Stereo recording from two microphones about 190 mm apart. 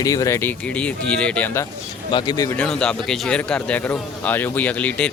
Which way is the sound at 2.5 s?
5° left (ahead or behind).